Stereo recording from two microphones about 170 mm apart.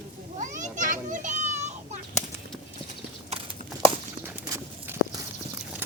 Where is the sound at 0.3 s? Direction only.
45° right (ahead or behind).